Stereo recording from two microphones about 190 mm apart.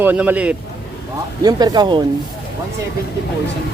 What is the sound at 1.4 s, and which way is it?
Speech, 20° right (ahead or behind).